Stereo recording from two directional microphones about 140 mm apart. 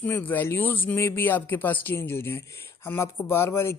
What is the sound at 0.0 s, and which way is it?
Speech, 15° left (ahead or behind).